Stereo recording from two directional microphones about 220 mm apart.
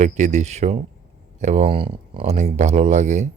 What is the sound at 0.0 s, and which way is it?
Speech, 30° right (ahead or behind).